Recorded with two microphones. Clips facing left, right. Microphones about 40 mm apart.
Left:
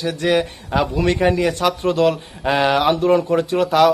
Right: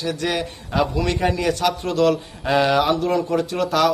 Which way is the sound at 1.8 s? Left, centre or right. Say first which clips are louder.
Left 2 dB; left.